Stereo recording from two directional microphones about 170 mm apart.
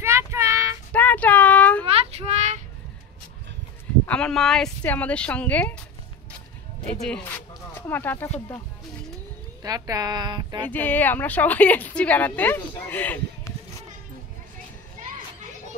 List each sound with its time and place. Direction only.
0.0 s child singing: 15° right (ahead or behind)
0.9 s a sound: 10° left (ahead or behind)
1.9 s child singing: 35° right (ahead or behind)
4.0 s a woman's voice: 5° left (ahead or behind)
6.9 s speech: 5° left (ahead or behind)
9.6 s a woman's voice: 20° right (ahead or behind)
10.6 s a woman's voice: 10° left (ahead or behind)
15.0 s children playing: 50° right (ahead or behind)